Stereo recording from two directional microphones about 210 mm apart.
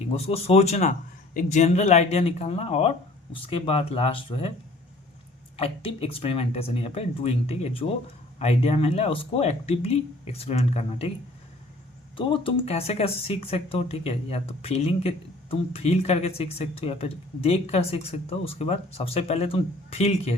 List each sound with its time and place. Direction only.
0.3 s speech: 30° left (ahead or behind)
5.5 s speech: 25° left (ahead or behind)
12.1 s speech: 25° left (ahead or behind)